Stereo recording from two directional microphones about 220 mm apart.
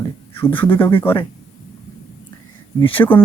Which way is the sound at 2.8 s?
25° left (ahead or behind).